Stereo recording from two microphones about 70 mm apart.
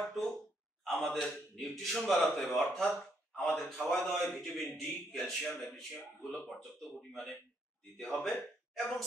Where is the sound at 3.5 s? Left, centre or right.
Centre.